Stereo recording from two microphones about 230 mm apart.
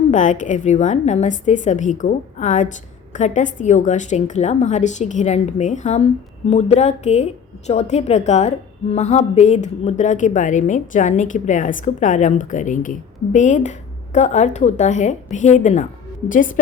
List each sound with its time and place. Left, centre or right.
0.1 s a woman's voice: left